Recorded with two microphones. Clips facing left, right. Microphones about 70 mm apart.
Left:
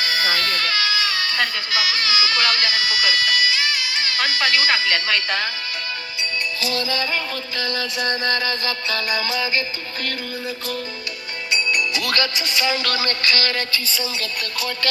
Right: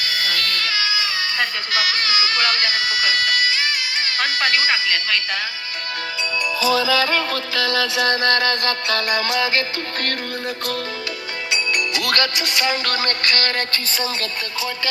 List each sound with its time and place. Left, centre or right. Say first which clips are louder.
0.0 s music: left 2 dB; left
0.7 s a sound: left 1 dB; centre
1.7 s speech: right 1 dB; right
4.9 s speech: left 1 dB; centre
6.9 s music: right 5 dB; right
11.5 s music: left 1 dB; right